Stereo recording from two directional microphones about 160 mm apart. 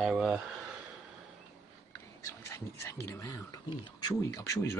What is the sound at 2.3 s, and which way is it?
Speech, 15° left (ahead or behind).